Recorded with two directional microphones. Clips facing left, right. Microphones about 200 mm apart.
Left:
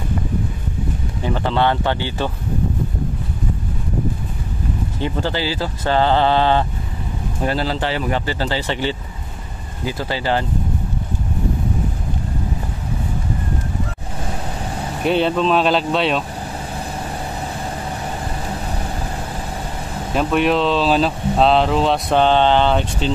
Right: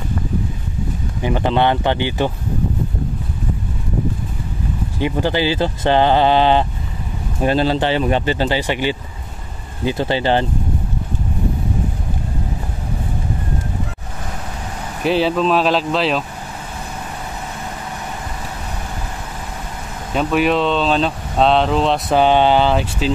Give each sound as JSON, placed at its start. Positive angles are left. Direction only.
{"t": 1.2, "sound": "speech", "side_deg": -15}
{"t": 5.0, "sound": "speech", "side_deg": -15}
{"t": 15.0, "sound": "speech", "side_deg": 0}
{"t": 20.2, "sound": "speech", "side_deg": 0}